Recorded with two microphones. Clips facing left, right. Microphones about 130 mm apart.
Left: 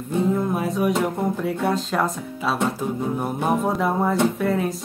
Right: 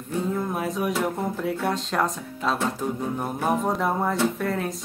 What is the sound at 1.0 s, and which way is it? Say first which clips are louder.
A woman's voice: left 3 dB; centre (ahead or behind).